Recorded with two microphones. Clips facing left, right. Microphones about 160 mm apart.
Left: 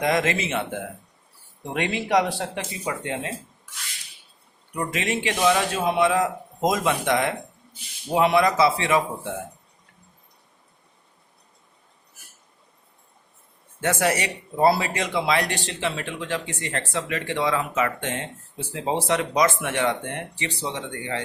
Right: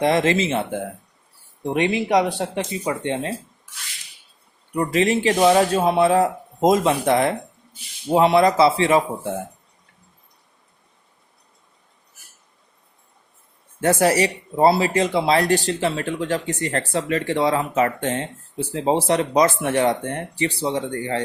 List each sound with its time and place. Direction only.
0.0 s speech: 30° right (ahead or behind)
1.7 s speech: 20° right (ahead or behind)
4.7 s speech: 35° right (ahead or behind)
13.8 s speech: 30° right (ahead or behind)